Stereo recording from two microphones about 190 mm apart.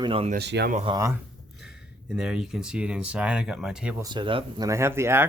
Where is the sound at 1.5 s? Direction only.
5° right (ahead or behind).